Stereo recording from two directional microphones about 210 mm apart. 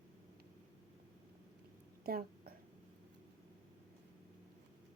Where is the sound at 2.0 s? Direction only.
45° right (ahead or behind).